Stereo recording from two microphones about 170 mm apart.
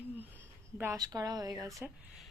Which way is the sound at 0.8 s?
20° right (ahead or behind).